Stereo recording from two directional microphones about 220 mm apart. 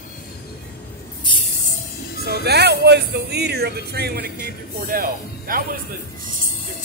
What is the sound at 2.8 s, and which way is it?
Speech, 50° right (ahead or behind).